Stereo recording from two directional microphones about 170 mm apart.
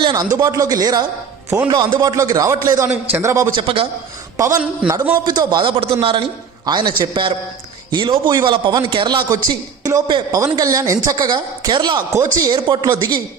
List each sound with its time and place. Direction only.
0.0 s a man's voice: 25° right (ahead or behind)